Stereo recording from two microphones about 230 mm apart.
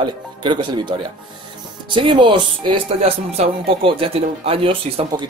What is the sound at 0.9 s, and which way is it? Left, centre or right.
Speech, right.